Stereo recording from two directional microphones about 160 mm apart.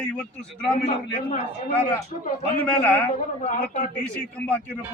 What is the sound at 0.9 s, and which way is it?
Speech, 50° left (ahead or behind).